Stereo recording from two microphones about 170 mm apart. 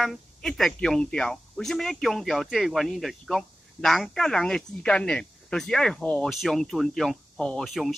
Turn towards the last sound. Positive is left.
turn(degrees=0)  # may be behind; listen again after turning